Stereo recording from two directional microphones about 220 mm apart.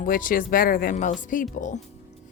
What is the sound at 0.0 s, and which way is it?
Speech, 40° left (ahead or behind).